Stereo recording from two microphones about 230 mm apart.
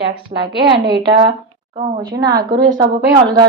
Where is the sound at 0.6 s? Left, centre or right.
Centre.